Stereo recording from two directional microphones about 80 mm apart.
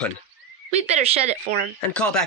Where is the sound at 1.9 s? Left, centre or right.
Centre.